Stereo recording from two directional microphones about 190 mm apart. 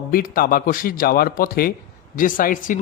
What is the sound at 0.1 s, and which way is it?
Speech, 50° left (ahead or behind).